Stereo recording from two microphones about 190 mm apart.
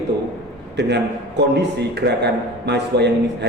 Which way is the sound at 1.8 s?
60° right (ahead or behind).